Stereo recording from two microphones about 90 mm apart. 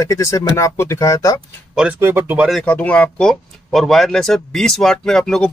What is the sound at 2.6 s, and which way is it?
Speech, 15° left (ahead or behind).